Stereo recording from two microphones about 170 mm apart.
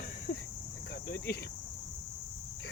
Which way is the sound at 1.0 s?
65° left (ahead or behind).